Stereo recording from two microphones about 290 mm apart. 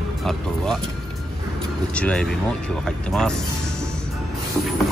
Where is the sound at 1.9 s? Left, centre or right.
Centre.